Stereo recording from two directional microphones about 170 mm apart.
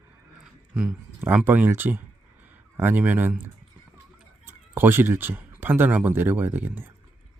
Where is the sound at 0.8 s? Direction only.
10° right (ahead or behind).